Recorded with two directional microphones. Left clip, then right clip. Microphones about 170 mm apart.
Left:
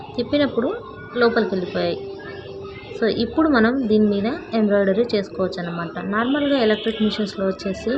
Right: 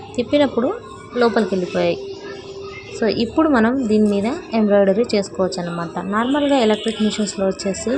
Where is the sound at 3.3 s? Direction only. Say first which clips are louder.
Right 1 dB; 15° right (ahead or behind).